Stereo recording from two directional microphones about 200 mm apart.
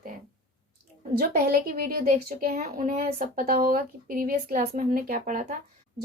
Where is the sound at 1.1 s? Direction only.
45° right (ahead or behind).